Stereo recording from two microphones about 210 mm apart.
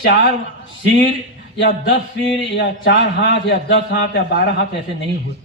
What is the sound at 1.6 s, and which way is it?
A man's voice, 60° left (ahead or behind).